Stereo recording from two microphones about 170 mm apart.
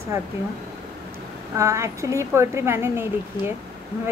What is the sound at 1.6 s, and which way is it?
Speech, 20° right (ahead or behind).